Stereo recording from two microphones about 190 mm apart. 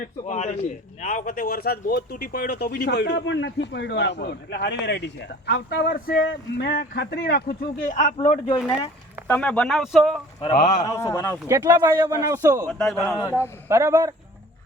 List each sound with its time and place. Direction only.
0.3 s a man's voice: 40° left (ahead or behind)
9.2 s speech: 10° left (ahead or behind)
10.4 s a man's voice: 35° left (ahead or behind)
10.8 s speech: 15° left (ahead or behind)
11.4 s speech: 15° right (ahead or behind)
12.6 s speech: 5° left (ahead or behind)
13.1 s speech: 15° left (ahead or behind)
13.7 s speech: 15° right (ahead or behind)